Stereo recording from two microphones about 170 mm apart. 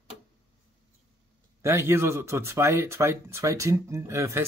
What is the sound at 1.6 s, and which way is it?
Speech, 15° right (ahead or behind).